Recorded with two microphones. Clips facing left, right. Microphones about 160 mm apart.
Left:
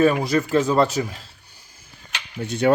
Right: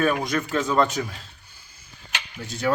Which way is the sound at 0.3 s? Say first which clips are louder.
Left 5 dB; 30° left (ahead or behind).